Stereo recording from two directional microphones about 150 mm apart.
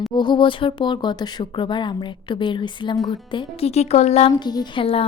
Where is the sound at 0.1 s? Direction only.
30° left (ahead or behind).